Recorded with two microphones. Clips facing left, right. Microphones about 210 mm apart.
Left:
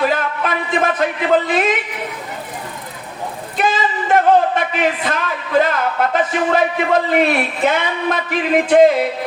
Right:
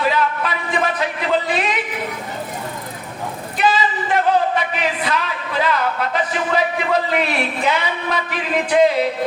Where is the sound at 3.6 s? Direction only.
50° left (ahead or behind).